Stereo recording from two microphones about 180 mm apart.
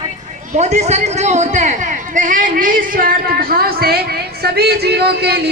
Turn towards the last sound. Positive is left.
turn(degrees=-65)  # may be behind; listen again after turning